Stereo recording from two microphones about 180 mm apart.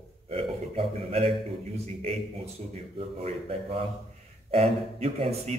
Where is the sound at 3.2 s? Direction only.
35° right (ahead or behind).